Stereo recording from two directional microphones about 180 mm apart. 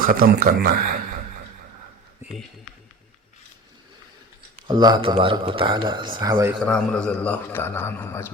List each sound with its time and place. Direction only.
0.0 s a man's voice: 55° right (ahead or behind)
4.7 s a man's voice: 25° right (ahead or behind)
6.7 s a man's voice: 5° left (ahead or behind)